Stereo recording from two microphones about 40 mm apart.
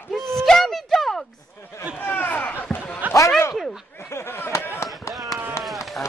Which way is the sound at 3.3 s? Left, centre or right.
Centre.